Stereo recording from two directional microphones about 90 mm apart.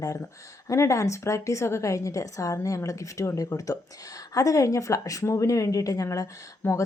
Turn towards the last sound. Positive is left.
turn(degrees=25)  # may be behind; listen again after turning